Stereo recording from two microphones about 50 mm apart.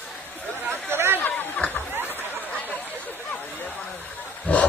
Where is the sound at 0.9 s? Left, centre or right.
Right.